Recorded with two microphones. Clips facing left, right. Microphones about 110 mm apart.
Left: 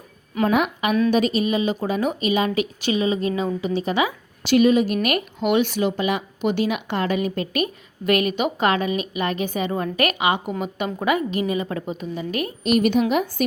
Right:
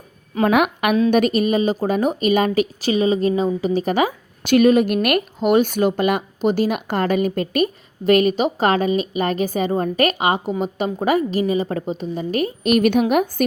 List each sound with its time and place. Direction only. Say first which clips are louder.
0.4 s a woman's voice: right 3 dB; 65° right (ahead or behind)
1.1 s a woman's voice: right 3 dB; 55° right (ahead or behind); by 12.5 s 35° right (ahead or behind)
12.6 s a woman's voice: right 2 dB; 55° right (ahead or behind)